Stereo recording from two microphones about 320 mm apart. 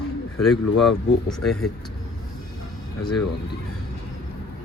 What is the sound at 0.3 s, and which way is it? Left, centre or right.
Speech, centre.